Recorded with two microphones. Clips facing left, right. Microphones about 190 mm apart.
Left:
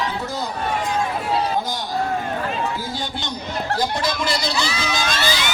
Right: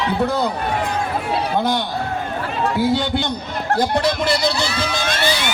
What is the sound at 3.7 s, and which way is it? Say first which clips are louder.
Crowd: right 6 dB; 60° right (ahead or behind).